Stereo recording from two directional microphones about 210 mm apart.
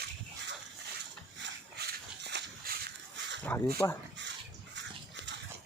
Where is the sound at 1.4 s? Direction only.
55° right (ahead or behind).